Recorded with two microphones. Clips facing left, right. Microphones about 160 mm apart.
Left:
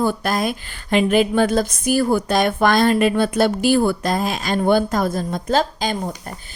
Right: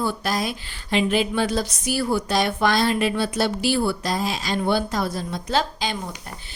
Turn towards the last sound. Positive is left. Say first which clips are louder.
# left 5 dB
turn(degrees=45)  # may be behind; listen again after turning